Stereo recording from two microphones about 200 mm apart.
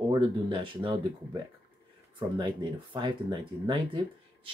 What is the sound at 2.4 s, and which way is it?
Speech, 20° right (ahead or behind).